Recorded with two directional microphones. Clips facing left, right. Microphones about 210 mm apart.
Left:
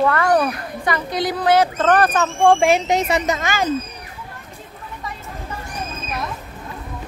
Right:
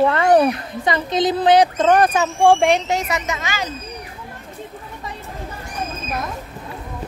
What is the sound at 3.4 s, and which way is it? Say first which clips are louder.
Speech: left 4 dB; 50° left (ahead or behind).